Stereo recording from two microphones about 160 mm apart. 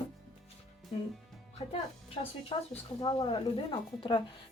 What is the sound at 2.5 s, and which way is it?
A woman's voice, 30° left (ahead or behind).